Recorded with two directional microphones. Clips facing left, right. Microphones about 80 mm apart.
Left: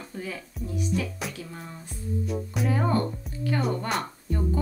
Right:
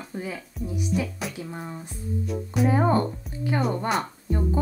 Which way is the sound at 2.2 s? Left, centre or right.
Centre.